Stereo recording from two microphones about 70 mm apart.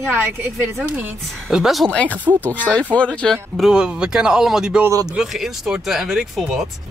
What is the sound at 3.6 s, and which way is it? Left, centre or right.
Speech, centre.